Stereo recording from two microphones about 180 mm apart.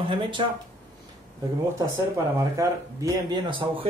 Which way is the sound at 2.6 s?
20° right (ahead or behind).